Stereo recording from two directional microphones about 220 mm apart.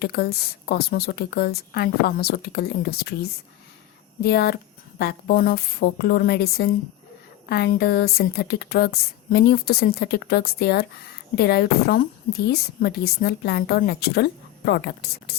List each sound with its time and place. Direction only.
0.0 s speech: 45° left (ahead or behind)
4.2 s speech: 45° left (ahead or behind)